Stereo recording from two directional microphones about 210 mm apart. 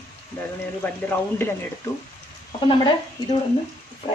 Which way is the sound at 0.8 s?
10° left (ahead or behind).